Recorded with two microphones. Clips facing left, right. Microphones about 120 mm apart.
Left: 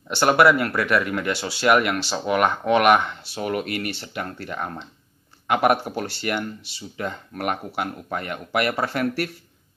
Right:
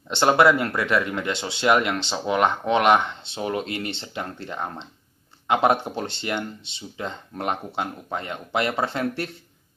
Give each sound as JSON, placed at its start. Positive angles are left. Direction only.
{"t": 0.1, "sound": "speech", "side_deg": -25}